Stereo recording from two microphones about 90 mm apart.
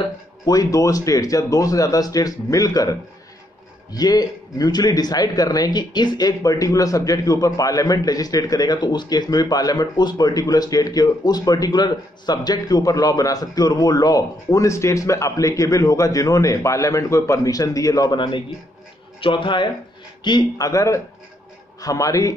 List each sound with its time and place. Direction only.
0.5 s a man's voice: 40° left (ahead or behind)
18.1 s speech: 60° left (ahead or behind)
20.2 s speech: 50° left (ahead or behind)